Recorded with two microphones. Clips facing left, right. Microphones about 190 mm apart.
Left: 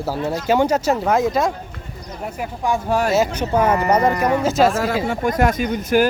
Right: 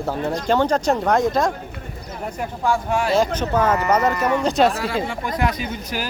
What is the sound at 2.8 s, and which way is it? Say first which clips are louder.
Speech: left 3 dB; 40° left (ahead or behind).